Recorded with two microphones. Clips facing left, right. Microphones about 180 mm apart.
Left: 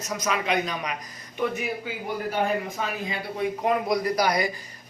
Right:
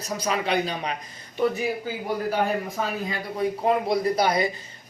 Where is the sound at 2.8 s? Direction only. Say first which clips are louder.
Right 2 dB; 35° right (ahead or behind).